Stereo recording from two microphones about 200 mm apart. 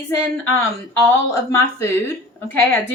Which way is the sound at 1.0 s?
15° left (ahead or behind).